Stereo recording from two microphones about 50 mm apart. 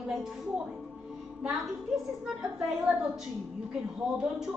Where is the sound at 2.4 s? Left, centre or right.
Right.